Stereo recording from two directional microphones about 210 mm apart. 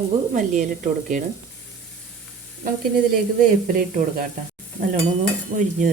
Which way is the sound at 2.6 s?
40° right (ahead or behind).